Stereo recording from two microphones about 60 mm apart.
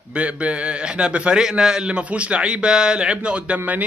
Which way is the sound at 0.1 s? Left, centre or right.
Right.